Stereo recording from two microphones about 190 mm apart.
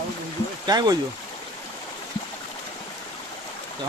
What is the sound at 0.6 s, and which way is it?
Speech, 20° right (ahead or behind).